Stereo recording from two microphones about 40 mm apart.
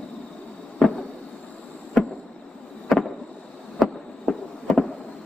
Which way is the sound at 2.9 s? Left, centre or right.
Centre.